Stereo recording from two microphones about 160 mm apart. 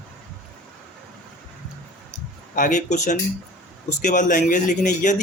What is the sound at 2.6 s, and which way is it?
Speech, 50° left (ahead or behind).